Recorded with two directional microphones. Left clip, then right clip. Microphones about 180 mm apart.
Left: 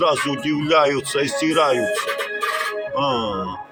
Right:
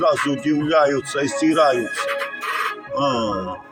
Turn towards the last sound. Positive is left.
turn(degrees=0)  # may be behind; listen again after turning